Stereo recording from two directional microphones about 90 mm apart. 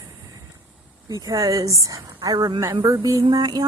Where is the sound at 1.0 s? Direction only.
45° right (ahead or behind).